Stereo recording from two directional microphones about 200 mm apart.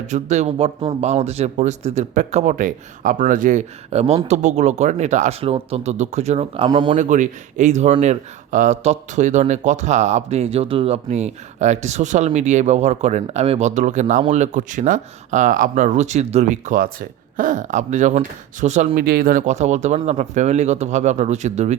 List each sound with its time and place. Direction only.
0.1 s speech: 35° right (ahead or behind)
6.9 s speech: 40° right (ahead or behind)